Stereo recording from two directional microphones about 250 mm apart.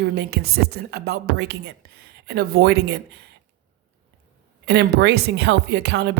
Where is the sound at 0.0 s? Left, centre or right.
Right.